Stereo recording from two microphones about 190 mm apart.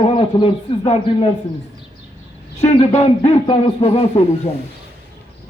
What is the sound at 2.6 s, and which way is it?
A man's voice, 35° left (ahead or behind).